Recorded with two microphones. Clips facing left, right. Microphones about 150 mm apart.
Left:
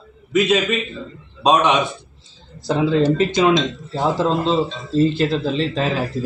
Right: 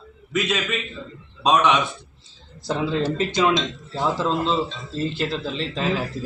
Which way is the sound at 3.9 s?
35° left (ahead or behind).